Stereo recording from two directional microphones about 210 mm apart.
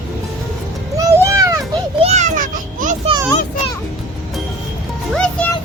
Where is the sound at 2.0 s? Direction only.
35° right (ahead or behind).